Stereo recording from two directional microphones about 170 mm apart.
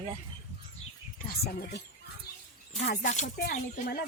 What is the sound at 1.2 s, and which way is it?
Speech, 60° left (ahead or behind).